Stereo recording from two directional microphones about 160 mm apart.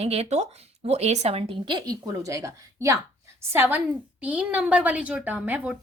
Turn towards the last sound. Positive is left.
turn(degrees=-10)  # may be behind; listen again after turning